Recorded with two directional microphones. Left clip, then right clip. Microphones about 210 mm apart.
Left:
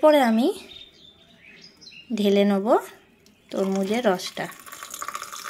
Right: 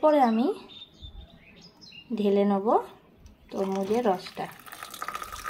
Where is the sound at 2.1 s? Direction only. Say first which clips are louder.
Left 4 dB; 30° left (ahead or behind).